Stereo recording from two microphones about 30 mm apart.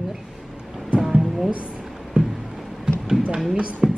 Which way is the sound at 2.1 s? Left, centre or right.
Right.